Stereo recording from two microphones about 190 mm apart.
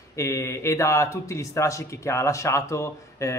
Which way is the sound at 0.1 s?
15° left (ahead or behind).